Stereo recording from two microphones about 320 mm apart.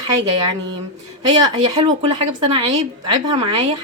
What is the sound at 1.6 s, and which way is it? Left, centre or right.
Speech, centre.